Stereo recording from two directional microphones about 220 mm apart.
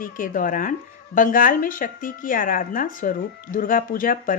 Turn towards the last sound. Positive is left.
turn(degrees=40)  # may be behind; listen again after turning